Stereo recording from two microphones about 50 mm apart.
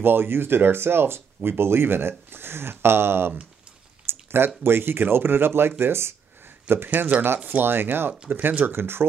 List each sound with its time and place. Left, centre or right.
0.0 s speech: right
4.1 s a sound: right
4.6 s speech: right
6.7 s speech: right
7.4 s speech: right